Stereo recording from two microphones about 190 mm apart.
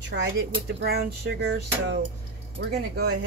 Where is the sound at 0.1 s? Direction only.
65° right (ahead or behind).